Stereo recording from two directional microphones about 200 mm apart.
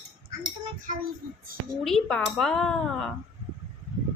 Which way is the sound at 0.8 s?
40° right (ahead or behind).